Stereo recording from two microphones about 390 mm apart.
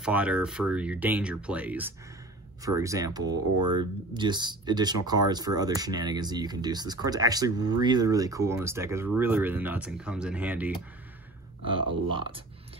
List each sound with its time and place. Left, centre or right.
0.0 s speech: centre
3.5 s speech: right
4.1 s speech: centre